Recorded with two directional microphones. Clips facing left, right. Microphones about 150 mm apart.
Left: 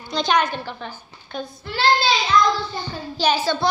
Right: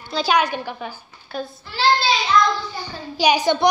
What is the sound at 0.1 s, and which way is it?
A woman's voice, 5° right (ahead or behind).